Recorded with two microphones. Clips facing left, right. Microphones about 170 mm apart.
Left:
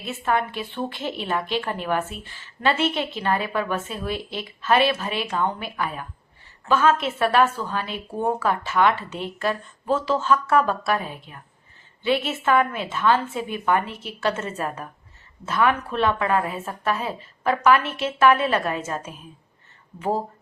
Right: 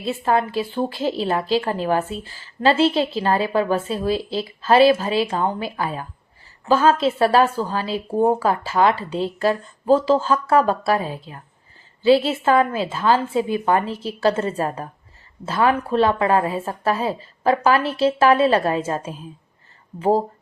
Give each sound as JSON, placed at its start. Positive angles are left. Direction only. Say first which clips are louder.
{"t": 0.0, "sound": "a woman's voice", "louder": "right 4 dB", "side_deg": -30}